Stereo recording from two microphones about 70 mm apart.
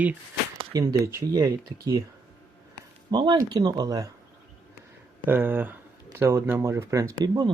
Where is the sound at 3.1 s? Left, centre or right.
Right.